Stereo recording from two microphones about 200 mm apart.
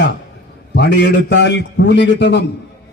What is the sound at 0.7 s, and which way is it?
A man's voice, 55° left (ahead or behind).